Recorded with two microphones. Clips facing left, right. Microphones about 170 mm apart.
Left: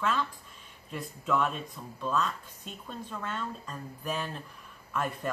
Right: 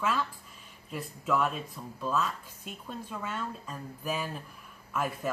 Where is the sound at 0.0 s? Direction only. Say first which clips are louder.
Even; 5° right (ahead or behind).